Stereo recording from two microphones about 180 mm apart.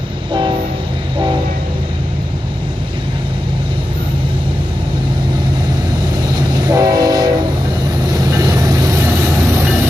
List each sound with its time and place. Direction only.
6.3 s train: 20° right (ahead or behind)
8.2 s vehicle: 20° right (ahead or behind)